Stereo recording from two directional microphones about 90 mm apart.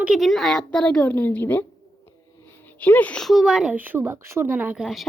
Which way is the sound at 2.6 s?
20° left (ahead or behind).